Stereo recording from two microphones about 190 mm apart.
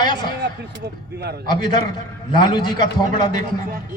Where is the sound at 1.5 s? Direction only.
20° left (ahead or behind).